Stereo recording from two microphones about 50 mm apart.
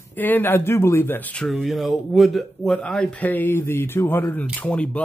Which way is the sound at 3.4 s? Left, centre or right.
Left.